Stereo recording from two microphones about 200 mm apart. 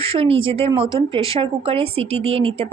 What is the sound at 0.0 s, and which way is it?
A woman's voice, 30° right (ahead or behind).